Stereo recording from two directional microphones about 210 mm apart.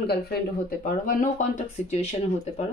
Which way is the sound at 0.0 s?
50° left (ahead or behind).